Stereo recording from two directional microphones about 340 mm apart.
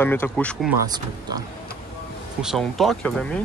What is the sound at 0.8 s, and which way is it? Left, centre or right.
Speech, centre.